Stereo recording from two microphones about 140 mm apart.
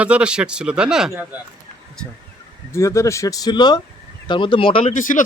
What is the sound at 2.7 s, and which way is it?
Speech, 20° left (ahead or behind).